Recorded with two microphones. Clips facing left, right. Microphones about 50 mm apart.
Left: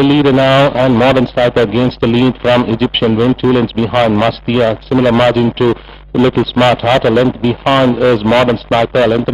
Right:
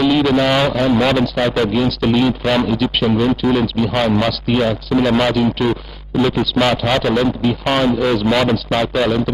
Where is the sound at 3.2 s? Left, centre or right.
Centre.